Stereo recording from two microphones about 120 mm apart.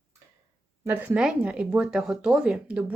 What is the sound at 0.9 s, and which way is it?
Speech, 15° right (ahead or behind).